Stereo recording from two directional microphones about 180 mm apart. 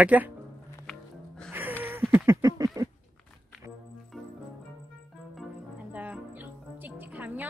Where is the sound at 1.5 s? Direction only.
10° right (ahead or behind).